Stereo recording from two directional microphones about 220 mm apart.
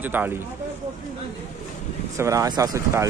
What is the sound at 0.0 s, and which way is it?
Speech, 10° right (ahead or behind).